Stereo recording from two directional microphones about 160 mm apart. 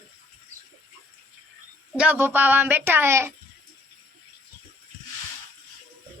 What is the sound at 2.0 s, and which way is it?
Speech, 10° right (ahead or behind).